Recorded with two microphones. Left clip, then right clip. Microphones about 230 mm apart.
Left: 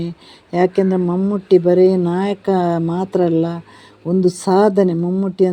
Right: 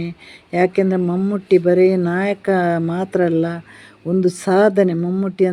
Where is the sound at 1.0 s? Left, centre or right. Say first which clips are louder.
Left 1 dB; centre.